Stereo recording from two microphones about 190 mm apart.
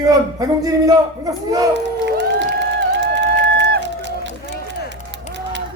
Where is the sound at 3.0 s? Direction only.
65° right (ahead or behind).